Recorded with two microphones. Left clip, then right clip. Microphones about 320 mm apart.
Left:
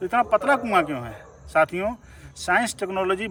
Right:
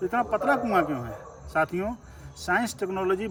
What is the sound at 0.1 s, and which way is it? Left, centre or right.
Speech, centre.